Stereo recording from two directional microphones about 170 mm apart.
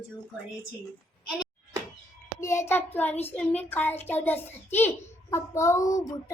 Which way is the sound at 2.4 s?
15° left (ahead or behind).